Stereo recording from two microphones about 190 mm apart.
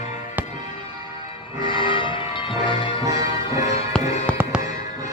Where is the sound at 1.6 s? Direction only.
25° left (ahead or behind).